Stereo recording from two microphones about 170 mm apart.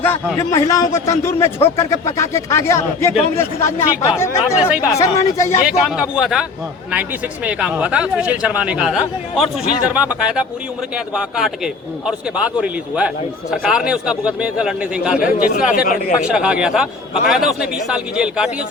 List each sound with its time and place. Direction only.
0.3 s speech: 20° left (ahead or behind)
4.5 s a man's voice: 5° right (ahead or behind)
4.9 s speech: 20° left (ahead or behind)
5.6 s a man's voice: 5° right (ahead or behind)
7.4 s a man's voice: 5° right (ahead or behind)
15.2 s speech: 55° left (ahead or behind)
16.2 s a man's voice: 5° right (ahead or behind)